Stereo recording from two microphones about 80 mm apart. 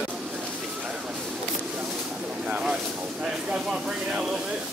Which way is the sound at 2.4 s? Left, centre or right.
Centre.